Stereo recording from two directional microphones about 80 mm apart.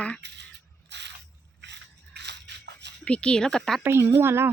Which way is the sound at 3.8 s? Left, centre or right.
Right.